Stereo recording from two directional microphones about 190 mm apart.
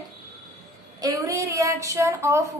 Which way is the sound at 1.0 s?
15° right (ahead or behind).